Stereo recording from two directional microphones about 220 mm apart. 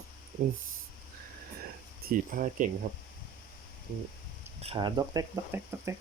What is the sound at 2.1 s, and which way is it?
Speech, 40° right (ahead or behind).